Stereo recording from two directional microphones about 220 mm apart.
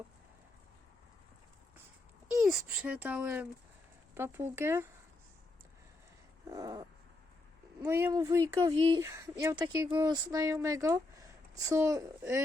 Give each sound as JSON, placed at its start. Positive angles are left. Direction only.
{"t": 2.4, "sound": "speech", "side_deg": 0}
{"t": 6.5, "sound": "speech", "side_deg": -15}